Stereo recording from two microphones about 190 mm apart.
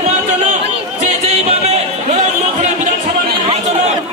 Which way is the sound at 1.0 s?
35° right (ahead or behind).